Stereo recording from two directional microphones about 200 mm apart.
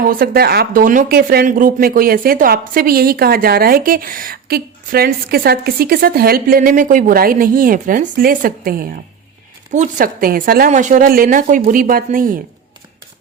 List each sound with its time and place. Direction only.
0.0 s speech: 45° right (ahead or behind)